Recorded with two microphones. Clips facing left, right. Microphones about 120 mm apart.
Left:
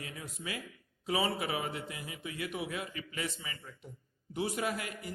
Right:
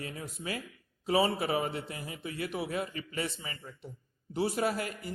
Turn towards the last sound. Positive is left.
turn(degrees=-35)  # may be behind; listen again after turning